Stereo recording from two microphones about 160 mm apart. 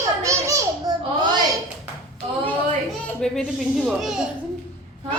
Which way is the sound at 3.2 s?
Centre (ahead or behind).